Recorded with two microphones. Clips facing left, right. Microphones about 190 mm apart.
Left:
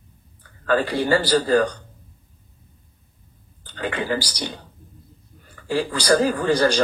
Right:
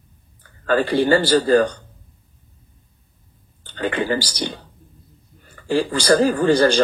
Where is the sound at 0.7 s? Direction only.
25° right (ahead or behind).